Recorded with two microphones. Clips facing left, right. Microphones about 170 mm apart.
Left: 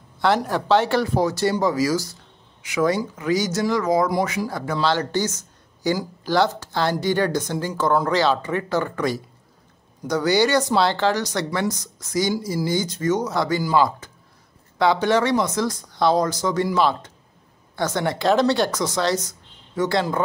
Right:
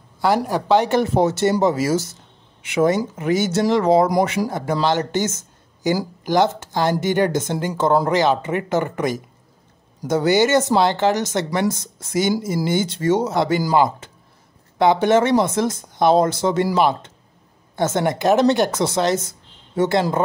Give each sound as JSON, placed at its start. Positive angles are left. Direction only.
{"t": 0.5, "sound": "speech", "side_deg": -15}